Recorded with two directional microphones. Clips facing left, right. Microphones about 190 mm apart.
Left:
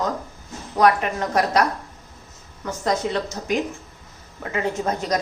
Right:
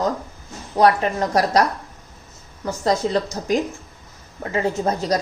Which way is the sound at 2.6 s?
35° right (ahead or behind).